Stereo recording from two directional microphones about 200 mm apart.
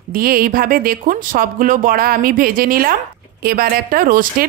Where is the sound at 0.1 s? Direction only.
45° right (ahead or behind).